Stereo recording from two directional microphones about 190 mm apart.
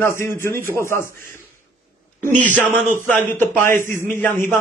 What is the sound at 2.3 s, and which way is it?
Speech, 40° right (ahead or behind).